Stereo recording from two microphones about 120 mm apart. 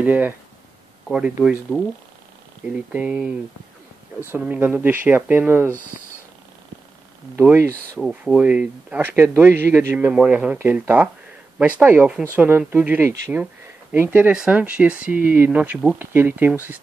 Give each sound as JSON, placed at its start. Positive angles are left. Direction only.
{"t": 0.0, "sound": "speech", "side_deg": -15}
{"t": 2.9, "sound": "speech", "side_deg": -10}
{"t": 4.4, "sound": "speech", "side_deg": -10}
{"t": 7.3, "sound": "speech", "side_deg": -15}